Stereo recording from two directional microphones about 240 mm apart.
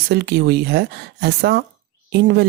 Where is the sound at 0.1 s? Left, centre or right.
Right.